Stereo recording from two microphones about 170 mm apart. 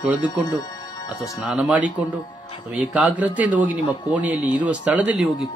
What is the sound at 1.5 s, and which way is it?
Speech, 5° right (ahead or behind).